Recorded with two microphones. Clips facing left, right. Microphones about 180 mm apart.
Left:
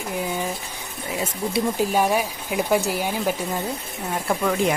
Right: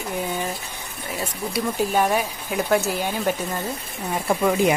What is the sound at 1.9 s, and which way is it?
Speech, 5° left (ahead or behind).